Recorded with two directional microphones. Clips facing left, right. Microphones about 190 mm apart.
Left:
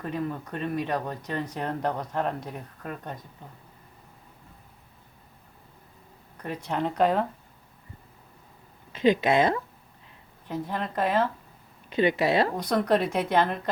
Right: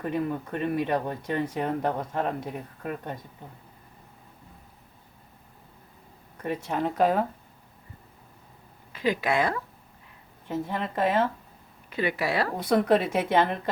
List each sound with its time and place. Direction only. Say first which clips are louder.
0.0 s speech: right 3 dB; 10° right (ahead or behind)
6.7 s speech: even; 5° right (ahead or behind)
8.9 s a woman's voice: left 4 dB; 20° left (ahead or behind)
10.5 s speech: right 1 dB; 5° right (ahead or behind)
11.9 s speech: left 5 dB; 20° left (ahead or behind)
12.5 s speech: right 2 dB; 5° right (ahead or behind)